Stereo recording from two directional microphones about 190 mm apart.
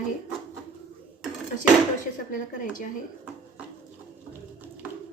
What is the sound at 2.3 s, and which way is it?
Speech, 45° left (ahead or behind).